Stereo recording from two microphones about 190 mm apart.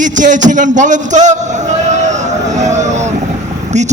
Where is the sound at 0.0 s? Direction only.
40° right (ahead or behind).